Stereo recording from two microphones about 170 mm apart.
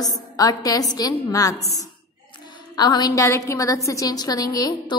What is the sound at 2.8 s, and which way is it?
A woman's voice, 25° left (ahead or behind).